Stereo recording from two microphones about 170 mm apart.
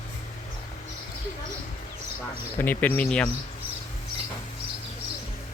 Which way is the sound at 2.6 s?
10° left (ahead or behind).